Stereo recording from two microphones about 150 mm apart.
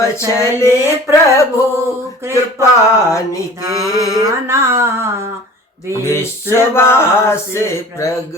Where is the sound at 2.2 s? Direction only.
20° right (ahead or behind).